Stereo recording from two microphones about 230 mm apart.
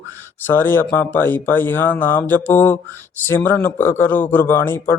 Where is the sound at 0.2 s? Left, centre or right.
Centre.